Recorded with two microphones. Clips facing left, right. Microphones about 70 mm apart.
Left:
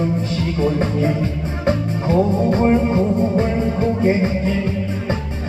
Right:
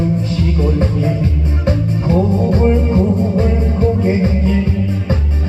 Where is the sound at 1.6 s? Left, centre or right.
Left.